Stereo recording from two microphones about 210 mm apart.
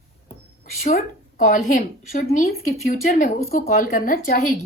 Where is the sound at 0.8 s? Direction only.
35° left (ahead or behind).